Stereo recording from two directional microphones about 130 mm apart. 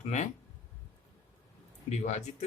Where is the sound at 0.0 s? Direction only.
65° left (ahead or behind).